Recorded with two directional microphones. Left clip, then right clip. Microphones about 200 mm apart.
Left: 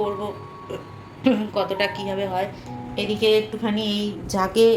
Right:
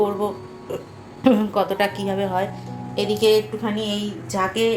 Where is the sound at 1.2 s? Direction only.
20° right (ahead or behind).